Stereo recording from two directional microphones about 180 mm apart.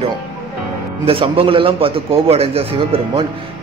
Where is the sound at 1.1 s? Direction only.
30° right (ahead or behind).